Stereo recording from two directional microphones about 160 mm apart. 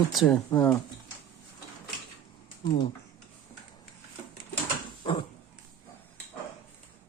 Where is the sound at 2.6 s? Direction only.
25° left (ahead or behind).